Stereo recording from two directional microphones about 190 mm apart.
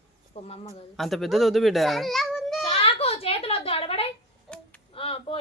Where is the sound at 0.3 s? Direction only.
30° left (ahead or behind).